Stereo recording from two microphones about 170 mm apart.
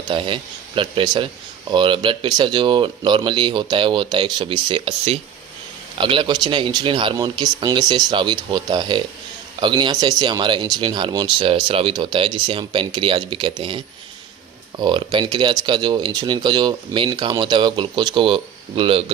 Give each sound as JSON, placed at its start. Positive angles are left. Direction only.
{"t": 0.1, "sound": "speech", "side_deg": -30}